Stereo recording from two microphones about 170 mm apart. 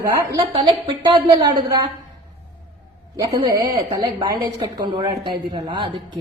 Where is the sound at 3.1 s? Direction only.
20° right (ahead or behind).